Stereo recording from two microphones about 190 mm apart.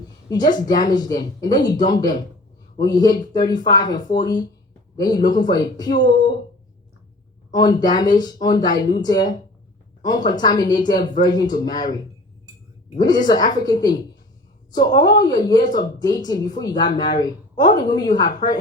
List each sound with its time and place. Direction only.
0.3 s speech: 20° left (ahead or behind)
7.5 s speech: 20° left (ahead or behind)
18.4 s speech: 40° left (ahead or behind)